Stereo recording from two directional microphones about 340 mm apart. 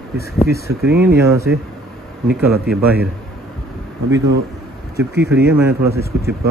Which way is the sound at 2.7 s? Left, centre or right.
Centre.